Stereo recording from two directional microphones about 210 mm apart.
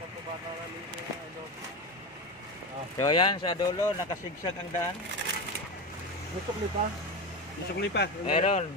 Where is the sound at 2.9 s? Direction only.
20° left (ahead or behind).